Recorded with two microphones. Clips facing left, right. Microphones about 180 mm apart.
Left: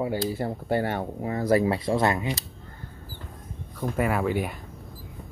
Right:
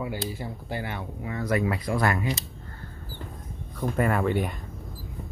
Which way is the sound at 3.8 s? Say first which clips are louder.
Right 1 dB; 5° left (ahead or behind).